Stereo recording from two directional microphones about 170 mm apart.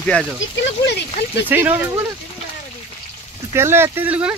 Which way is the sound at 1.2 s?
70° left (ahead or behind).